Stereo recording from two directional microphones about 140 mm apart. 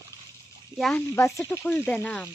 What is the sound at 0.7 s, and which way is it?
Speech, 5° left (ahead or behind).